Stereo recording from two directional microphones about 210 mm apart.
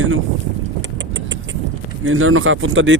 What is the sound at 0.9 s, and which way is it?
Vehicle, 60° right (ahead or behind).